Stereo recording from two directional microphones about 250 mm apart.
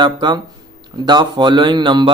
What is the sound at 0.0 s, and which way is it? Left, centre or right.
Speech, centre.